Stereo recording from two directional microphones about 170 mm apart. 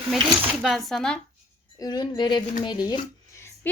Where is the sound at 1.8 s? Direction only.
25° left (ahead or behind).